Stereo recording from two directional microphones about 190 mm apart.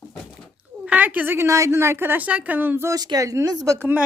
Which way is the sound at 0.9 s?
10° right (ahead or behind).